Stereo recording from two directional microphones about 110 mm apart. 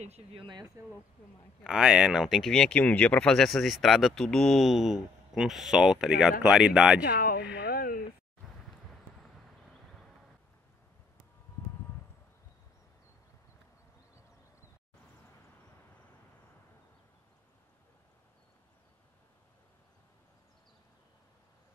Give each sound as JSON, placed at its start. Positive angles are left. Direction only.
{"t": 0.0, "sound": "speech", "side_deg": -70}
{"t": 1.6, "sound": "speech", "side_deg": -5}